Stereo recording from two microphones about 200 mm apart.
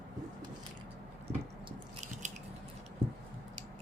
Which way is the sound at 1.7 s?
35° right (ahead or behind).